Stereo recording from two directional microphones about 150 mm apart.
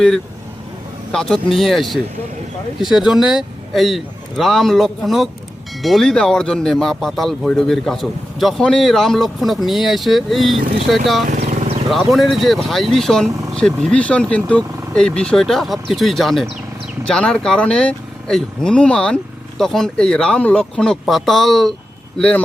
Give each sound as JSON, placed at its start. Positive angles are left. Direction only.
{"t": 1.1, "sound": "speech", "side_deg": 0}